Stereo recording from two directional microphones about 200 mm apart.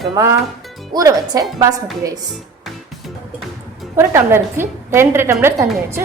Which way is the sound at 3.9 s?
15° right (ahead or behind).